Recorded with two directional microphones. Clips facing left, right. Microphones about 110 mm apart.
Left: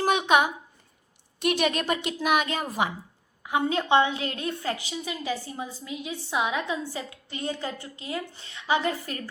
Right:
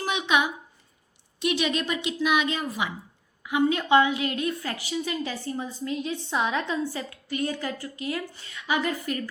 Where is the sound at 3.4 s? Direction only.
35° left (ahead or behind).